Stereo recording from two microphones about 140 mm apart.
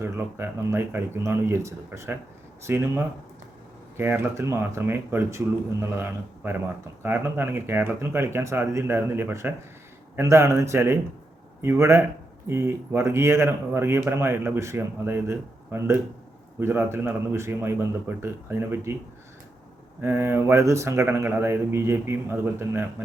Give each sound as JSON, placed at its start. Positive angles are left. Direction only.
{"t": 0.0, "sound": "speech", "side_deg": -20}
{"t": 20.0, "sound": "speech", "side_deg": -15}